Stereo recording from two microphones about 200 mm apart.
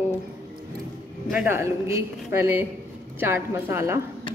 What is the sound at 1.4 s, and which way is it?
A woman's voice, 15° right (ahead or behind).